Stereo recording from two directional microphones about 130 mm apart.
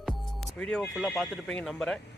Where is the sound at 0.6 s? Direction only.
5° left (ahead or behind).